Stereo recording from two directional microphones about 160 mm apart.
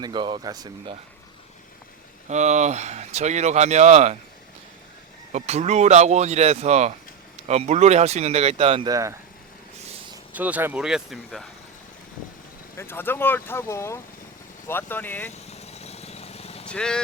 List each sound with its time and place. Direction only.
0.0 s speech: 30° right (ahead or behind)
2.2 s speech: 45° right (ahead or behind)
5.3 s speech: 45° right (ahead or behind)
8.9 s speech: 20° right (ahead or behind)
10.3 s speech: 10° right (ahead or behind)
12.7 s speech: 15° left (ahead or behind)
15.3 s vehicle: 40° left (ahead or behind)
16.6 s speech: 5° left (ahead or behind)